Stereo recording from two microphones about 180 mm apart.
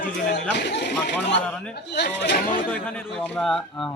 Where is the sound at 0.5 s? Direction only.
70° left (ahead or behind).